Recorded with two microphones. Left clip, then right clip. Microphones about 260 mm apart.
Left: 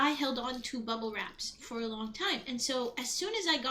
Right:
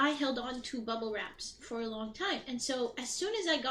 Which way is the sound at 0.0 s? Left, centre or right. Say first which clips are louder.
Left 1 dB; centre.